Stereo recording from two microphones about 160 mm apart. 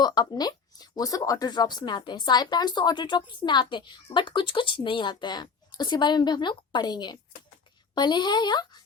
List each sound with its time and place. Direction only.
0.0 s speech: 25° left (ahead or behind)